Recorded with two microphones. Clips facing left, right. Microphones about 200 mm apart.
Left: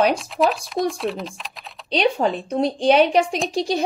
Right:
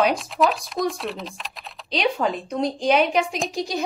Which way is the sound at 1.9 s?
30° left (ahead or behind).